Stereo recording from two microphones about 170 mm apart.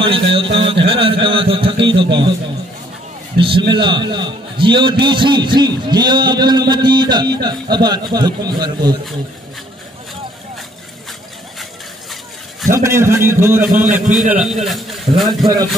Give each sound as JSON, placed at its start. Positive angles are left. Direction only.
{"t": 0.0, "sound": "a man's voice", "side_deg": -30}
{"t": 3.3, "sound": "a man's voice", "side_deg": -30}
{"t": 12.7, "sound": "a man's voice", "side_deg": -15}